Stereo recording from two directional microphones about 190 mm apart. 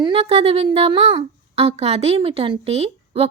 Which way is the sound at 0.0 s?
30° right (ahead or behind).